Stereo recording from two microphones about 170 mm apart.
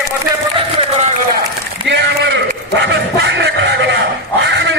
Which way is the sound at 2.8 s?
85° right.